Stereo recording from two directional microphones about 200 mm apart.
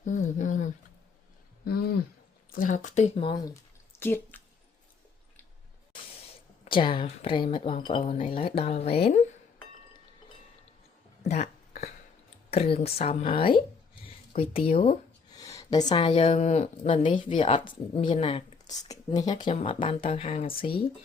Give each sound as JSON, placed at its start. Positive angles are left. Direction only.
{"t": 0.0, "sound": "a sound", "side_deg": 40}
{"t": 2.6, "sound": "speech", "side_deg": 40}
{"t": 3.3, "sound": "a woman's voice", "side_deg": 20}
{"t": 6.7, "sound": "a woman's voice", "side_deg": 25}
{"t": 11.2, "sound": "a sound", "side_deg": 35}
{"t": 12.5, "sound": "a woman's voice", "side_deg": 30}